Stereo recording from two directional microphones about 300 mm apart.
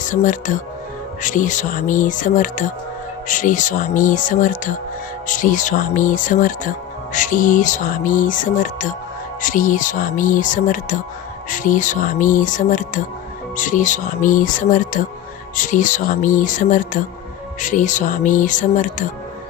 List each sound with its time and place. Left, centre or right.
0.1 s music: left